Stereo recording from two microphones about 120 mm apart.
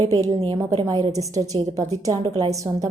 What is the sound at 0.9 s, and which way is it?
A woman's voice, 35° right (ahead or behind).